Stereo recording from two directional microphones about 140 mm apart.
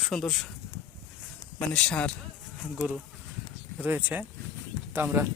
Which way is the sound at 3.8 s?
10° right (ahead or behind).